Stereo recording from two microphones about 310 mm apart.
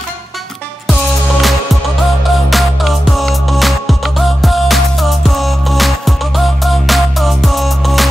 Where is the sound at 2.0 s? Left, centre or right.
Centre.